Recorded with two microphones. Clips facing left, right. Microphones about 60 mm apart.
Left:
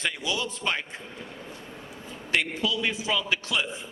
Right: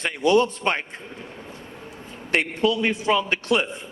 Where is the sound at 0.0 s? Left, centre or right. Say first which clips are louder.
Right 11 dB; right.